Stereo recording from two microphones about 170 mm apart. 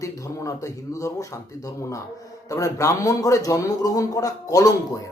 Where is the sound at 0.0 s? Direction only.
20° left (ahead or behind).